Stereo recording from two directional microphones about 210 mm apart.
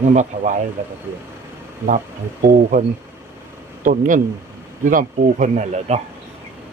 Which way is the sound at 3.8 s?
40° right (ahead or behind).